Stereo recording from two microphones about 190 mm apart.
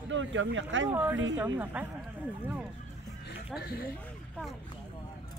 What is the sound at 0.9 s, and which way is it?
Speech, 10° right (ahead or behind).